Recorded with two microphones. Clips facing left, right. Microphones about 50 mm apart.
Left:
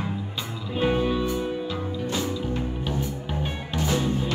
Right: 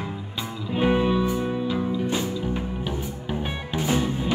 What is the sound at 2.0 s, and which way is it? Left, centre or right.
Music, centre.